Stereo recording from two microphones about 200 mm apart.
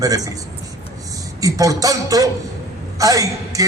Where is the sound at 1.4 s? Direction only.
15° right (ahead or behind).